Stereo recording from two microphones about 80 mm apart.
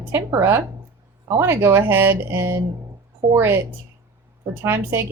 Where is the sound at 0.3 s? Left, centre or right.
Right.